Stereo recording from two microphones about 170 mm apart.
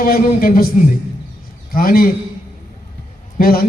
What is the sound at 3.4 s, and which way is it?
Speech, 60° left (ahead or behind).